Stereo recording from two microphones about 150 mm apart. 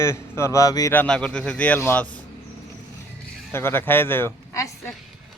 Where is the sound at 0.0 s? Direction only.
20° left (ahead or behind).